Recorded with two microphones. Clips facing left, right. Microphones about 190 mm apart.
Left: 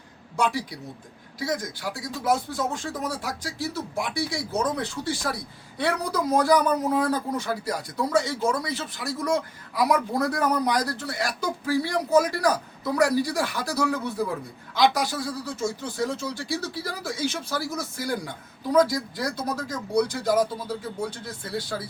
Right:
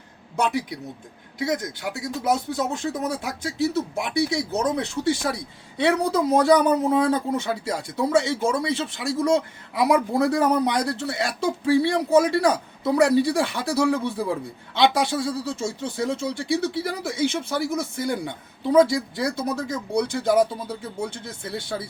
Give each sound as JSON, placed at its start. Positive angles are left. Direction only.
{"t": 0.3, "sound": "a man's voice", "side_deg": -20}